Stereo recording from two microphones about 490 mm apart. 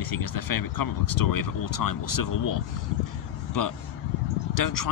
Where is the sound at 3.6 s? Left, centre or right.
Left.